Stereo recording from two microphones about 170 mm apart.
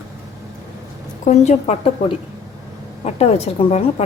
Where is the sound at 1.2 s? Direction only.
40° left (ahead or behind).